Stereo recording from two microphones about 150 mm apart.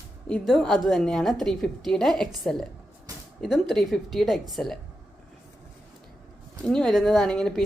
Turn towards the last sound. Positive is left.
turn(degrees=5)  # may be behind; listen again after turning